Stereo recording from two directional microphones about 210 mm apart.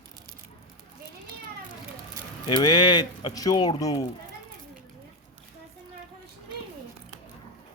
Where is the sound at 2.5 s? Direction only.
20° left (ahead or behind).